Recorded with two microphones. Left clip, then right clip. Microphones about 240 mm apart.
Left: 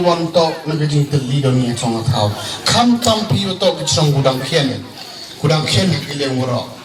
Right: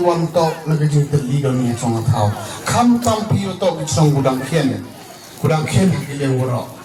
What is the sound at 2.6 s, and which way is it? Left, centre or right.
A man's voice, left.